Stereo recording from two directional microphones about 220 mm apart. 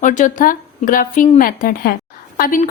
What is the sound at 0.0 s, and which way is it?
A woman's voice, 35° left (ahead or behind).